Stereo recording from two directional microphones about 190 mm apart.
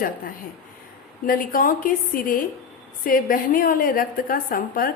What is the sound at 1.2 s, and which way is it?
A woman's voice, 45° left (ahead or behind).